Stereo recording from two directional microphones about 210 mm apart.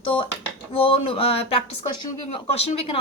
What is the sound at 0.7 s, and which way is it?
A woman's voice, 25° left (ahead or behind).